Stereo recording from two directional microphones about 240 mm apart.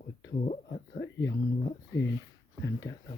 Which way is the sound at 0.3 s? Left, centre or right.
Left.